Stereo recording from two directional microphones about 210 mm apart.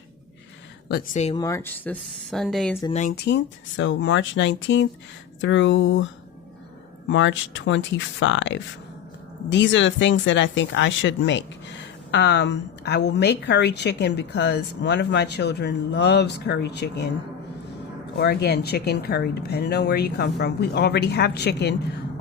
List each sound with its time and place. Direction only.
0.9 s speech: 50° left (ahead or behind)
1.1 s speech: 30° left (ahead or behind)
1.4 s speech: 15° left (ahead or behind)
2.9 s speech: 35° left (ahead or behind)
3.2 s speech: 55° left (ahead or behind)
7.1 s a woman's voice: 60° left (ahead or behind)
18.2 s a woman's voice: 50° left (ahead or behind)